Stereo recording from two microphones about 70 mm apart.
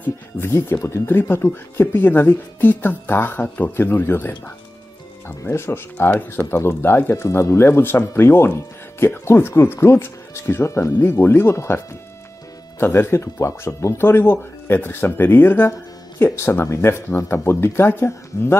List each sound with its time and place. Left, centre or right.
0.4 s a woman's voice: left
5.4 s speech: left
7.2 s speech: left